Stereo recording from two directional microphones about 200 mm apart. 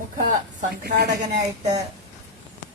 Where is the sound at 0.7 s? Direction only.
50° right (ahead or behind).